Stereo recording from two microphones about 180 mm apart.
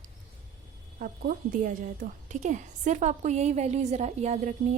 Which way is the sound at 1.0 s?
50° right (ahead or behind).